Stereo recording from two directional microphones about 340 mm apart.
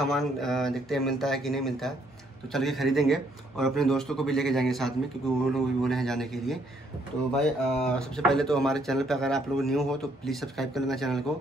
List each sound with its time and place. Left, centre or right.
0.0 s speech: centre